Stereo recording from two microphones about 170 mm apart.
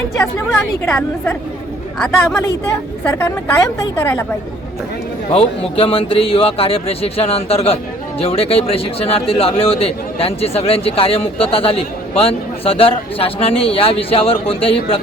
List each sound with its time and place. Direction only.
0.9 s a woman's voice: 5° left (ahead or behind)
3.9 s a woman's voice: 15° left (ahead or behind)
5.3 s speech: 35° left (ahead or behind)